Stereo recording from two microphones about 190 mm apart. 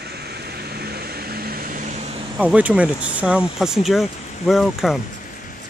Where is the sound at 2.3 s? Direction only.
5° right (ahead or behind).